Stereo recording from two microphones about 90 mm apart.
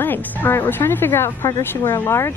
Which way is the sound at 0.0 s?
25° left (ahead or behind).